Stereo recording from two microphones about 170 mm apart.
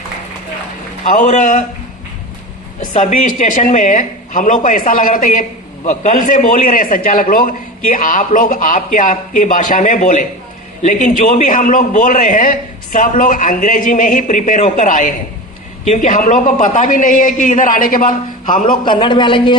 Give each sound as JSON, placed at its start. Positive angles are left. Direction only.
{"t": 1.2, "sound": "speech", "side_deg": 45}
{"t": 2.9, "sound": "speech", "side_deg": 45}
{"t": 18.9, "sound": "speech", "side_deg": 30}